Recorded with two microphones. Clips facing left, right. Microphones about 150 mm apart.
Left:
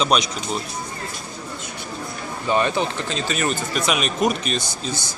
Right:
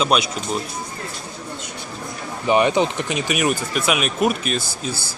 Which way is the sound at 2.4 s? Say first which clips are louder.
Right 4 dB; 15° right (ahead or behind).